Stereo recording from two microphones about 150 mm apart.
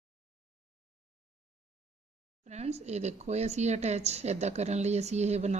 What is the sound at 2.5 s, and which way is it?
A woman's voice, 45° right (ahead or behind).